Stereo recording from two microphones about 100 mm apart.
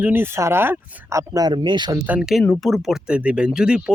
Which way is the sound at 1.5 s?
50° right (ahead or behind).